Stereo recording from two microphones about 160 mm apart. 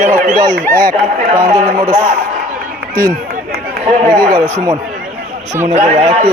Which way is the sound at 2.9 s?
60° right (ahead or behind).